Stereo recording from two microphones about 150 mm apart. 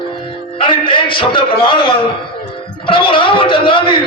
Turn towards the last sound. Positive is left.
turn(degrees=35)  # may be behind; listen again after turning